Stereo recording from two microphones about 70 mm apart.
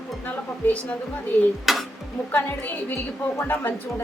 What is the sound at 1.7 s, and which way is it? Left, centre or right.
Stir, centre.